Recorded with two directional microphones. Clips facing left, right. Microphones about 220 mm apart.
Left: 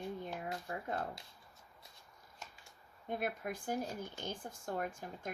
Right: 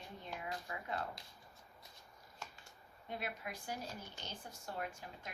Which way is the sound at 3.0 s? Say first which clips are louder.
Left 6 dB; 50° left (ahead or behind).